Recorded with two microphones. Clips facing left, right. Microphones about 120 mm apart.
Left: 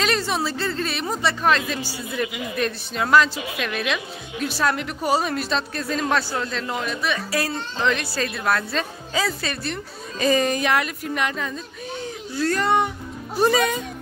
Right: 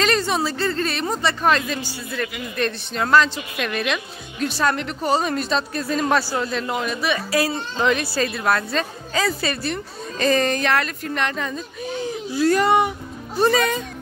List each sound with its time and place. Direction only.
0.0 s a woman's voice: centre (ahead or behind)
2.0 s speech: 20° left (ahead or behind)
2.5 s a woman's voice: 5° left (ahead or behind)
10.1 s a woman's voice: 10° left (ahead or behind); by 12.9 s 10° right (ahead or behind)
13.4 s speech: 10° left (ahead or behind)